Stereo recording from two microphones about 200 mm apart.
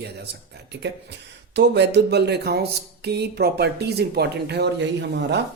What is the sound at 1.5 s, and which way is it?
Speech, 60° right (ahead or behind).